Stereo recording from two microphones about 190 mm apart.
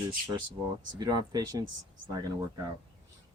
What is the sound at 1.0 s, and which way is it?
Speech, 20° right (ahead or behind).